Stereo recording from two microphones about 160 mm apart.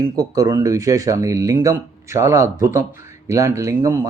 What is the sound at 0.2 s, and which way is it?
Speech, 20° right (ahead or behind).